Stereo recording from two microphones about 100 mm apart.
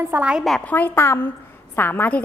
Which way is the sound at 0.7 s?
20° left (ahead or behind).